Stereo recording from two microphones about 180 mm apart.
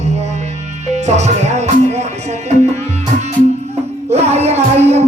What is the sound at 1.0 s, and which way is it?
Music, 40° right (ahead or behind).